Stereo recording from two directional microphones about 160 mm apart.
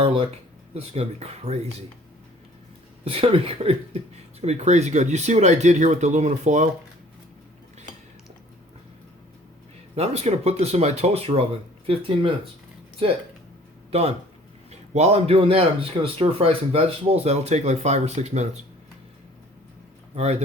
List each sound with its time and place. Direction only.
0.0 s a sound: 35° right (ahead or behind)
0.7 s speech: 40° right (ahead or behind)
3.0 s speech: 35° right (ahead or behind)
9.9 s speech: 40° right (ahead or behind)
14.7 s speech: 40° right (ahead or behind)